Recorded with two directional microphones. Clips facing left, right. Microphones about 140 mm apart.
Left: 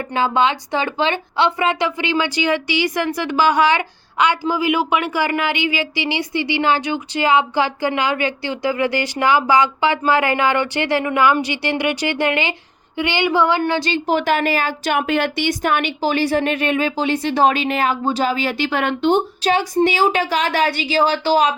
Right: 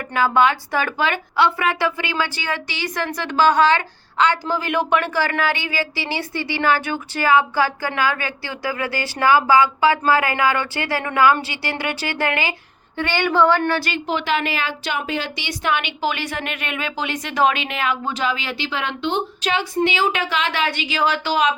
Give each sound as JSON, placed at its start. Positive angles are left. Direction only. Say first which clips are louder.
{"t": 0.0, "sound": "speech", "louder": "even", "side_deg": 25}
{"t": 14.1, "sound": "speech", "louder": "left 4 dB", "side_deg": 45}
{"t": 15.0, "sound": "speech", "louder": "left 7 dB", "side_deg": 60}